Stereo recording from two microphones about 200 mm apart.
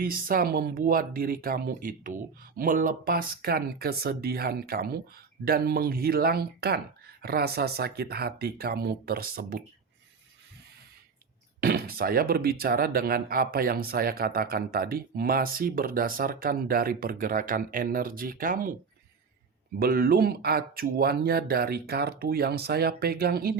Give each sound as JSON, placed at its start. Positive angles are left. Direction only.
{"t": 0.0, "sound": "speech", "side_deg": -45}
{"t": 11.6, "sound": "speech", "side_deg": -50}
{"t": 19.8, "sound": "speech", "side_deg": -50}